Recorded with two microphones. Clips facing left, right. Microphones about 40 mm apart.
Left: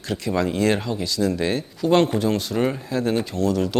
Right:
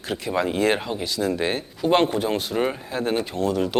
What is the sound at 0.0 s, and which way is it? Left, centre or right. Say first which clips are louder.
Speech: left 1 dB; centre.